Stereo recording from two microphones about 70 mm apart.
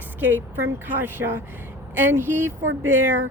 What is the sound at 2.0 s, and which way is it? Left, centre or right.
Speech, right.